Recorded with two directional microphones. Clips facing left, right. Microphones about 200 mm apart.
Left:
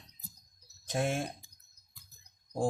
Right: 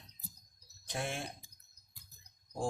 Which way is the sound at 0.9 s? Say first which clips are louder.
Left 7 dB; 45° left (ahead or behind).